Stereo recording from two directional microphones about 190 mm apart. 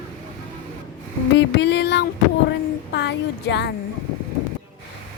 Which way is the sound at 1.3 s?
65° left (ahead or behind).